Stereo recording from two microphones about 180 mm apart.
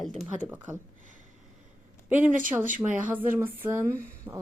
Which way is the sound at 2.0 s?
10° right (ahead or behind).